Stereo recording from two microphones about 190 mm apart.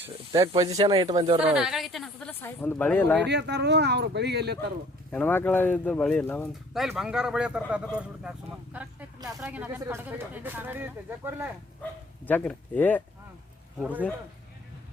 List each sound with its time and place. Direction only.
0.0 s speech: 20° right (ahead or behind)
1.4 s speech: 5° right (ahead or behind)
3.2 s speech: 65° right (ahead or behind)
5.1 s speech: 10° left (ahead or behind); by 11.5 s 10° right (ahead or behind)
12.2 s speech: 10° left (ahead or behind)